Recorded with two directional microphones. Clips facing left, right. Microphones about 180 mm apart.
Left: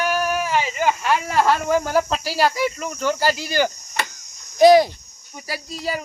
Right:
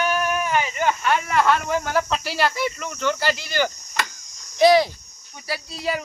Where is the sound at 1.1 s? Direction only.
35° left (ahead or behind).